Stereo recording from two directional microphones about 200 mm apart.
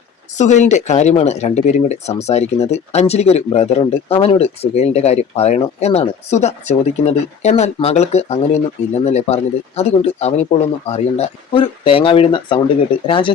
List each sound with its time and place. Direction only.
0.3 s speech: 35° left (ahead or behind)